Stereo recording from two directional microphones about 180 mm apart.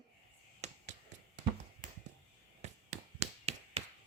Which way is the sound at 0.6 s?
40° right (ahead or behind).